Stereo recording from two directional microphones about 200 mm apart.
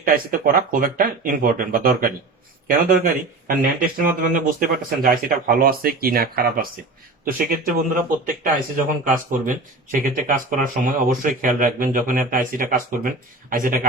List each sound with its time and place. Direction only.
0.0 s speech: 45° right (ahead or behind)